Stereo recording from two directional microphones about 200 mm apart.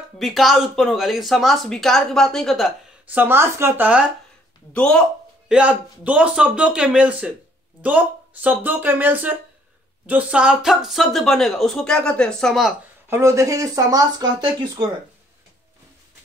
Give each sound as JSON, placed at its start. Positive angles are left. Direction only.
{"t": 0.2, "sound": "speech", "side_deg": 0}
{"t": 4.7, "sound": "speech", "side_deg": 5}
{"t": 5.5, "sound": "speech", "side_deg": -5}
{"t": 13.1, "sound": "speech", "side_deg": -15}